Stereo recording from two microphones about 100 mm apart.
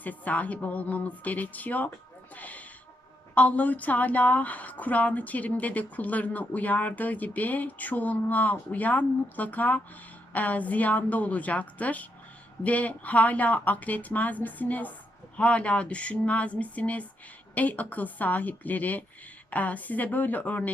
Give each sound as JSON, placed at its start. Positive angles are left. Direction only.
{"t": 0.0, "sound": "speech", "side_deg": 15}
{"t": 2.3, "sound": "a sound", "side_deg": 15}
{"t": 3.3, "sound": "speech", "side_deg": 15}